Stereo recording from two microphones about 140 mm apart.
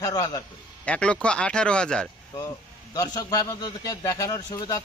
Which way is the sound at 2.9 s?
25° left (ahead or behind).